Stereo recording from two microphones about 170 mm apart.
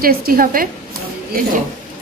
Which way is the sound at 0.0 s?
60° right (ahead or behind).